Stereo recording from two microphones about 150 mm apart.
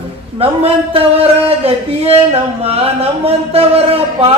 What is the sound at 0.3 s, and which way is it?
Speech, 40° right (ahead or behind).